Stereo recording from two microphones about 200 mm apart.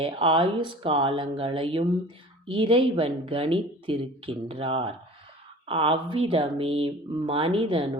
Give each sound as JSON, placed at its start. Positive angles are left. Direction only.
{"t": 0.0, "sound": "speech", "side_deg": -25}